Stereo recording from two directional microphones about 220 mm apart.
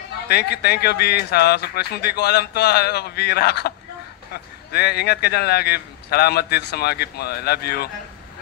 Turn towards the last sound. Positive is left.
turn(degrees=45)  # may be behind; listen again after turning